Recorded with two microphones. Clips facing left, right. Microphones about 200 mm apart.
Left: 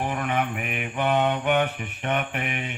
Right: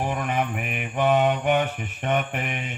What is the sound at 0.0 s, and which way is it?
Mantra, 60° left (ahead or behind).